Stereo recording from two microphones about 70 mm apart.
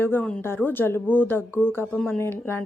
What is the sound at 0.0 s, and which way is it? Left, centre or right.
Speech, left.